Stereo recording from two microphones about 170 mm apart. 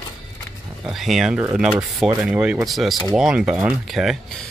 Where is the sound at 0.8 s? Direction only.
Centre (ahead or behind).